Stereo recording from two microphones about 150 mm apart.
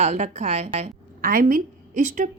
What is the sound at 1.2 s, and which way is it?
A woman's voice, 70° right (ahead or behind).